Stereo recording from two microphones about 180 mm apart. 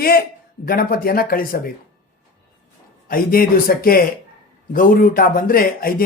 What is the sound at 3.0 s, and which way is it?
Speech, 55° left (ahead or behind).